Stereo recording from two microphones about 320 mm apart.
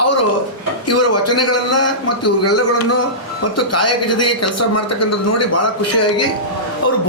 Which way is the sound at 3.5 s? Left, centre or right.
Left.